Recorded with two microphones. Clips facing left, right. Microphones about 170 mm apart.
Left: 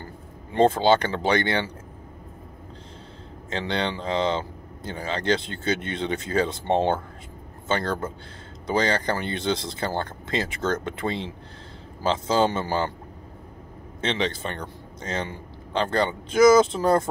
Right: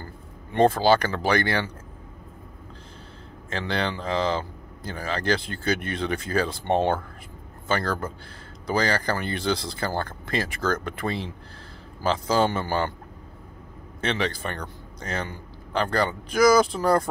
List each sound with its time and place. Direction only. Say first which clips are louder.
0.0 s speech: left 1 dB; 25° left (ahead or behind)
3.4 s speech: left 1 dB; 25° left (ahead or behind)
14.0 s speech: even; 25° left (ahead or behind)